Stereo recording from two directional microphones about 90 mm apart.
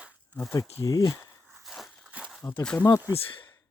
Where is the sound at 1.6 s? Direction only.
Centre (ahead or behind).